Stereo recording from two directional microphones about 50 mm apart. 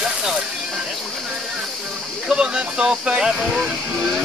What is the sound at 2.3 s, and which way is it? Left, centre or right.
Speech, centre.